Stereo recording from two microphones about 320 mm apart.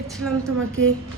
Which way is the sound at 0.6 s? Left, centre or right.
Right.